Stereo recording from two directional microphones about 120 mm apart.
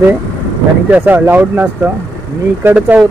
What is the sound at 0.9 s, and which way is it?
Speech, 15° right (ahead or behind).